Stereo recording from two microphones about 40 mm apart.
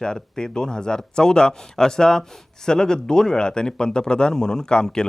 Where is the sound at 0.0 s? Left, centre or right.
Centre.